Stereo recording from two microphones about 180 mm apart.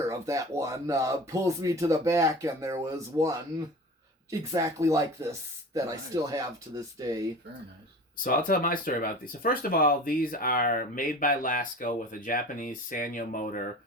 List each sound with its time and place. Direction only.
0.1 s speech: 15° right (ahead or behind)
8.2 s speech: 50° left (ahead or behind)